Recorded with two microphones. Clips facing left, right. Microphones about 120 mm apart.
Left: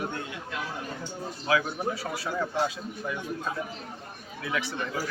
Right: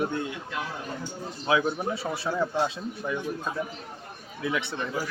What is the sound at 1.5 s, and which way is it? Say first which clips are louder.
Speech: right 2 dB; 25° right (ahead or behind).